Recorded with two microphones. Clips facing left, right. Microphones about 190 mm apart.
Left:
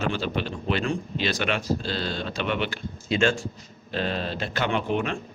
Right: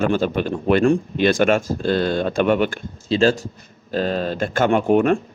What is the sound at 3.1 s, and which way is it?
Speech, 35° right (ahead or behind).